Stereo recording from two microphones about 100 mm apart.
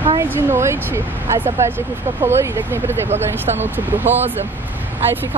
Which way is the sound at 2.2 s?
25° right (ahead or behind).